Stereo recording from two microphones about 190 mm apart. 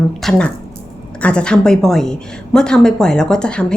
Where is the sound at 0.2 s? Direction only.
5° left (ahead or behind).